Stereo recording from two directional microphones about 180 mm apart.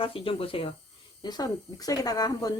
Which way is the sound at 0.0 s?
30° left (ahead or behind).